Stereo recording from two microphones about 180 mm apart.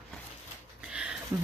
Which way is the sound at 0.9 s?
5° right (ahead or behind).